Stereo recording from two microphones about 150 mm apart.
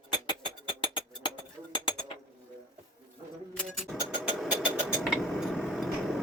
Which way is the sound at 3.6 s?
Centre (ahead or behind).